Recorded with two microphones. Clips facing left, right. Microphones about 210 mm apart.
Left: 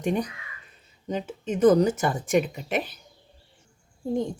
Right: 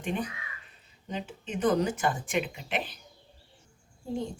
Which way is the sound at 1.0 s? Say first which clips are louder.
Left 7 dB; 40° left (ahead or behind).